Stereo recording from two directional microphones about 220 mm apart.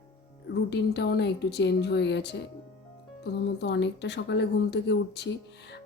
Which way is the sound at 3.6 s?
50° left (ahead or behind).